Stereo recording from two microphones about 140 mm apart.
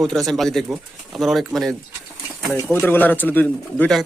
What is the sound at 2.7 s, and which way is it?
Speech, 15° left (ahead or behind).